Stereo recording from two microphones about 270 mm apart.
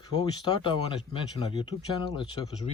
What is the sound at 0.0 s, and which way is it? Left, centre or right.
Speech, centre.